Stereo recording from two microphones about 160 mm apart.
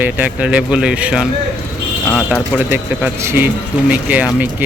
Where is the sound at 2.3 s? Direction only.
Centre (ahead or behind).